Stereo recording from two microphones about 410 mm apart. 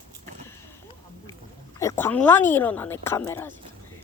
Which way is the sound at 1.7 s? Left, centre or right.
Centre.